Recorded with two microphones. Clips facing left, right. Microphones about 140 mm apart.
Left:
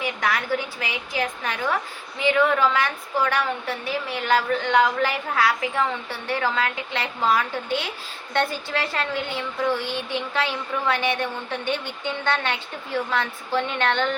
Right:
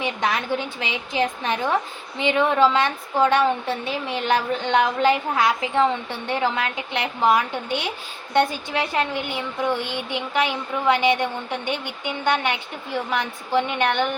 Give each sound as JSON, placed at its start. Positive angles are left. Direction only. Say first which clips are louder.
{"t": 0.0, "sound": "a woman's voice", "louder": "right 1 dB", "side_deg": -20}